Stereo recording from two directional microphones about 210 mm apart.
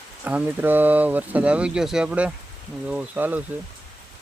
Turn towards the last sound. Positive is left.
turn(degrees=-10)  # may be behind; listen again after turning